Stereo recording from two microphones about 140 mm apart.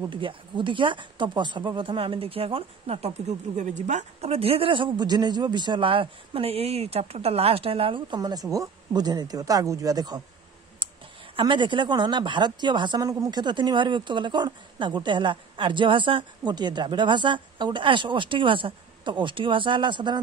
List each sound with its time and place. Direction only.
0.1 s speech: 35° right (ahead or behind)
10.8 s clicking: 35° right (ahead or behind)
11.3 s speech: 35° right (ahead or behind)